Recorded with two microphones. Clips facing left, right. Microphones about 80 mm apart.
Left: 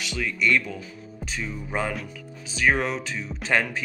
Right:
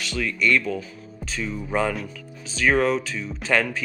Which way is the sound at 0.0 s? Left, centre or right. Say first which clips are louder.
Right 2 dB; centre.